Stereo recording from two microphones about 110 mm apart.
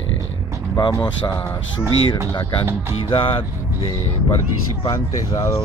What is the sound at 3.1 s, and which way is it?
Speech, 50° left (ahead or behind).